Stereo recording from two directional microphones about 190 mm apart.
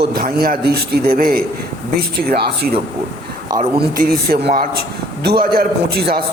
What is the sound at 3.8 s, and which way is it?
A man's voice, 50° right (ahead or behind).